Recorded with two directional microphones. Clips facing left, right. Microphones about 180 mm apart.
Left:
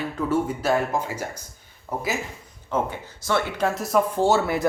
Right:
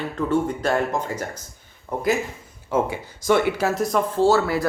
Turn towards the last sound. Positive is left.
turn(degrees=20)  # may be behind; listen again after turning